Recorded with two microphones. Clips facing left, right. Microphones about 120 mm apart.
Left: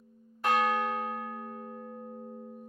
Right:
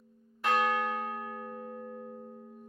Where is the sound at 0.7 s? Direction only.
20° left (ahead or behind).